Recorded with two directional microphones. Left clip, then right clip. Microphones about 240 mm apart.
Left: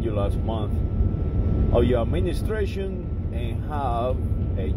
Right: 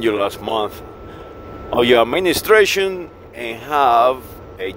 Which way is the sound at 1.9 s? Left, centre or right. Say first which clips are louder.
Right 12 dB; right.